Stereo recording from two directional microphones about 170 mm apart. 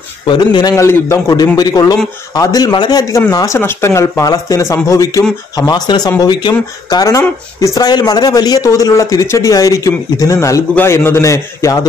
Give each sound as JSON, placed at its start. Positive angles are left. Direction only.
{"t": 0.3, "sound": "speech", "side_deg": 25}